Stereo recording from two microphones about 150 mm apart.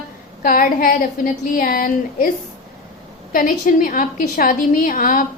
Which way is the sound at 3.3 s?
70° left (ahead or behind).